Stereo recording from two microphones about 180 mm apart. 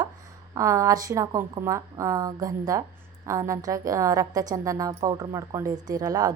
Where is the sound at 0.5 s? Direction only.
15° right (ahead or behind).